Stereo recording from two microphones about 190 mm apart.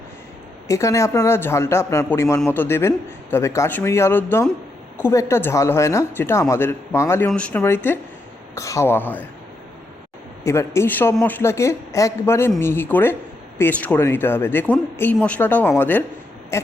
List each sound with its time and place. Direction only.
0.7 s speech: 15° left (ahead or behind)
10.4 s speech: 15° left (ahead or behind)